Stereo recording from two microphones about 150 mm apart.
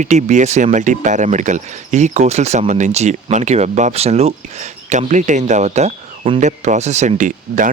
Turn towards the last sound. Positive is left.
turn(degrees=-60)  # may be behind; listen again after turning